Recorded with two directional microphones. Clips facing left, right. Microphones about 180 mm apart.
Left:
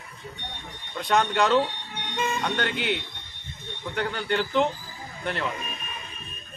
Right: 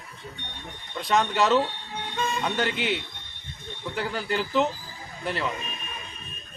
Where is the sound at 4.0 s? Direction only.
5° right (ahead or behind).